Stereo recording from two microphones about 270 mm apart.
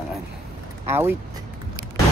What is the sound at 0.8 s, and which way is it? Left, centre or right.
Speech, centre.